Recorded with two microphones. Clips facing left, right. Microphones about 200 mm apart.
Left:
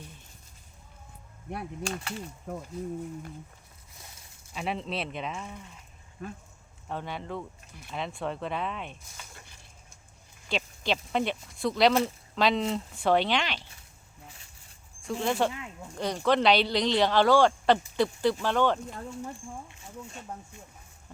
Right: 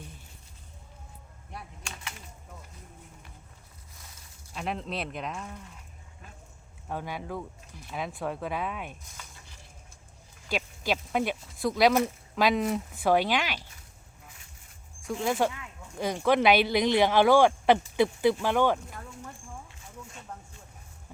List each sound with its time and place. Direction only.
1.9 s speech: 35° left (ahead or behind)
2.5 s speech: 60° left (ahead or behind)
4.5 s speech: centre (ahead or behind)
6.8 s speech: 5° right (ahead or behind)
10.5 s speech: 5° right (ahead or behind)
15.2 s speech: 5° right (ahead or behind)